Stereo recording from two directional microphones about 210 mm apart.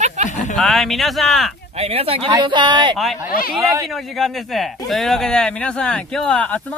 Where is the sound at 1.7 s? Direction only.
30° right (ahead or behind).